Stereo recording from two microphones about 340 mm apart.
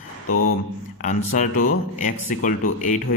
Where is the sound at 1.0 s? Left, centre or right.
Left.